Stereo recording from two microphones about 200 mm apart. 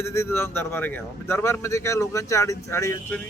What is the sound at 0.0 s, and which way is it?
A man's voice, 15° left (ahead or behind).